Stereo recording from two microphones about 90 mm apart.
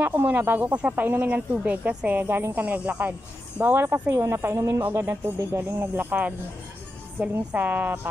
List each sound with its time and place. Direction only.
0.0 s speech: 20° right (ahead or behind)